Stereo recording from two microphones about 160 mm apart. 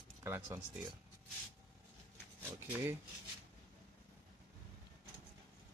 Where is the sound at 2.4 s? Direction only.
15° right (ahead or behind).